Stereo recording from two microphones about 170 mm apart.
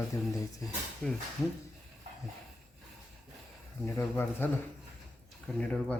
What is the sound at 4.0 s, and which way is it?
Speech, 15° left (ahead or behind).